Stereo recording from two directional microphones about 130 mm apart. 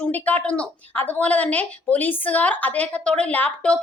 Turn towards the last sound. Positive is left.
turn(degrees=10)  # may be behind; listen again after turning